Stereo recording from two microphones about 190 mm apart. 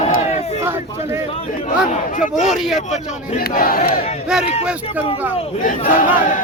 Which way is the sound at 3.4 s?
50° left (ahead or behind).